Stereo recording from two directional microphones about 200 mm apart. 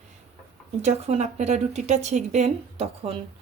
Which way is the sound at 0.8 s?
30° right (ahead or behind).